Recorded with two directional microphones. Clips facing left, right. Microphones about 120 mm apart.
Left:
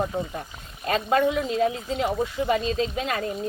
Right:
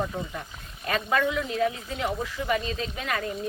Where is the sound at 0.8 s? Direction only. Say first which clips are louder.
Left 4 dB; 30° left (ahead or behind).